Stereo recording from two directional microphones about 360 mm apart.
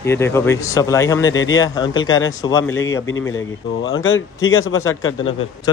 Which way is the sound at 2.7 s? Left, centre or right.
Left.